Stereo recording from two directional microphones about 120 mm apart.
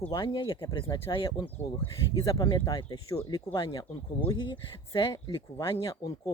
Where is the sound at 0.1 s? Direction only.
35° left (ahead or behind).